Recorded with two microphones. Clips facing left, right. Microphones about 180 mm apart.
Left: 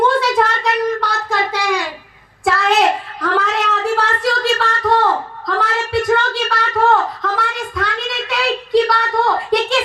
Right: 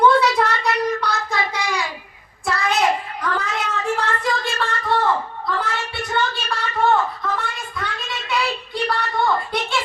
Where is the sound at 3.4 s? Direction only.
75° left (ahead or behind).